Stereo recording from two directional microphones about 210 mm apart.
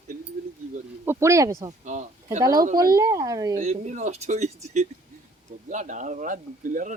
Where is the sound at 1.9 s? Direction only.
35° right (ahead or behind).